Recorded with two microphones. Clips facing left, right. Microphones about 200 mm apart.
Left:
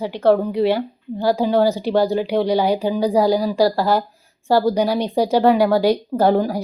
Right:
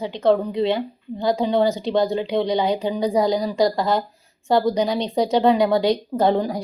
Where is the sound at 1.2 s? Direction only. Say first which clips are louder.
Left 2 dB; 10° left (ahead or behind).